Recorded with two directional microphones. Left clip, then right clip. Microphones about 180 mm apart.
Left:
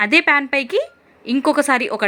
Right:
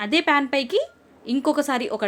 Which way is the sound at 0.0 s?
15° left (ahead or behind).